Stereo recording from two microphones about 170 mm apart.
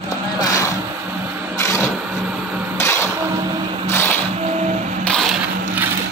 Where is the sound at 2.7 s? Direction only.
15° left (ahead or behind).